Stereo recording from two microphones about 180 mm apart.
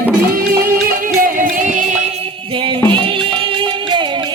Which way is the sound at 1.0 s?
50° right (ahead or behind).